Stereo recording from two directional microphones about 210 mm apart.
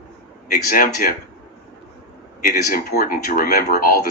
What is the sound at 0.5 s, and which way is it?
Speech, 45° left (ahead or behind).